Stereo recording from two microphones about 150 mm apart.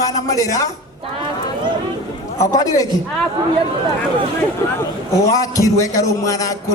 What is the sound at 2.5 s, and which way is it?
Speech, 25° left (ahead or behind).